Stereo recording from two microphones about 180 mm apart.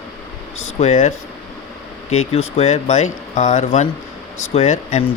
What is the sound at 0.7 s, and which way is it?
Speech, 40° left (ahead or behind).